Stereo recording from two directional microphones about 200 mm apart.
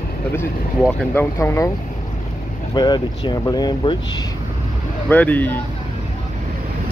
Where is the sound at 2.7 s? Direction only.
20° left (ahead or behind).